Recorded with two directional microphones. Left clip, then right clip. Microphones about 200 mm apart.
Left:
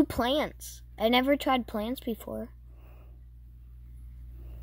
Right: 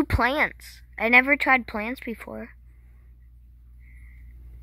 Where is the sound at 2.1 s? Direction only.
20° right (ahead or behind).